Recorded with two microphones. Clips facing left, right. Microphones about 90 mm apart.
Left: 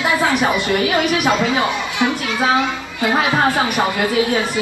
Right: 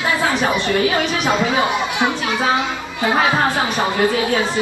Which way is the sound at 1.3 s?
15° right (ahead or behind).